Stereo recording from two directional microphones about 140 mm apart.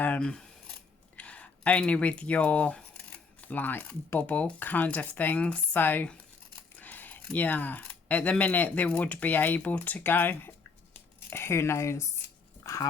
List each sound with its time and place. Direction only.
0.0 s speech: 10° left (ahead or behind)
12.6 s dog: 25° left (ahead or behind)